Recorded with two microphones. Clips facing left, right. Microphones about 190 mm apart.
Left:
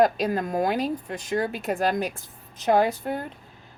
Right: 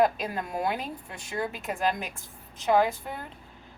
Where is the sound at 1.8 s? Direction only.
40° left (ahead or behind).